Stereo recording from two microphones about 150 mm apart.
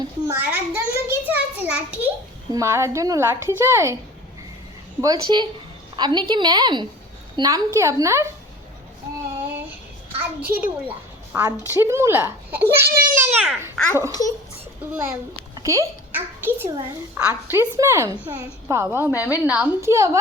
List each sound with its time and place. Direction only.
0.3 s a sound: 15° right (ahead or behind)
2.5 s a woman's voice: 20° right (ahead or behind)
4.9 s a woman's voice: 25° right (ahead or behind)
10.2 s a child's voice: 15° right (ahead or behind)
11.7 s a child's voice: 15° right (ahead or behind)
13.8 s a child's voice: 5° left (ahead or behind)
14.1 s a child's voice: 25° left (ahead or behind)
14.9 s a child's voice: 10° right (ahead or behind)